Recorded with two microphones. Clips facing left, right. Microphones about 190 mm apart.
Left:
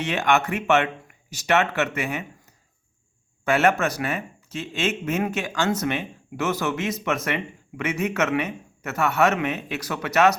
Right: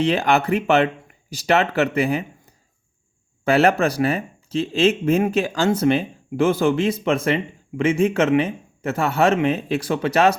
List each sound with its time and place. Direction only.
0.0 s speech: 35° right (ahead or behind)
3.4 s speech: 35° right (ahead or behind)